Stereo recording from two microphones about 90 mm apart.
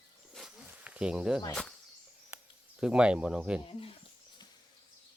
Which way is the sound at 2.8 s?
10° right (ahead or behind).